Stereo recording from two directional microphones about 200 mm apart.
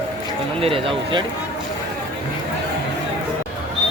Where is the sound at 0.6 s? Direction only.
30° right (ahead or behind).